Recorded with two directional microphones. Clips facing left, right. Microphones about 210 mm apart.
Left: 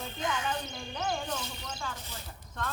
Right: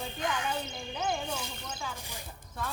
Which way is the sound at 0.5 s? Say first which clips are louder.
Right 1 dB; 10° right (ahead or behind).